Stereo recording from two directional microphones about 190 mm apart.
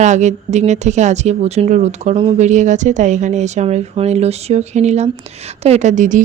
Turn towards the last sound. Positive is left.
turn(degrees=-40)  # may be behind; listen again after turning